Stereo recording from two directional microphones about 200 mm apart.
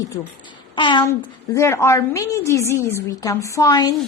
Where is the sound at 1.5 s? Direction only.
15° left (ahead or behind).